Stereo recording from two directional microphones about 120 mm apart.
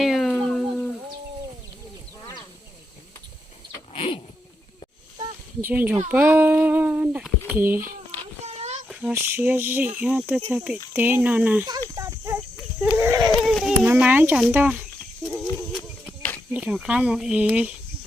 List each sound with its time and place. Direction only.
0.0 s a sound: centre (ahead or behind)
3.9 s dog: 50° left (ahead or behind)
5.6 s speech: 15° right (ahead or behind)
8.4 s child singing: 60° right (ahead or behind)
8.9 s child singing: 10° right (ahead or behind)
9.1 s speech: 15° right (ahead or behind)
11.9 s a sound: 25° right (ahead or behind)
13.0 s speech: 20° right (ahead or behind)
13.3 s a sound: centre (ahead or behind)
13.8 s speech: 15° right (ahead or behind)
15.3 s horse: 5° right (ahead or behind)
16.5 s speech: 10° right (ahead or behind)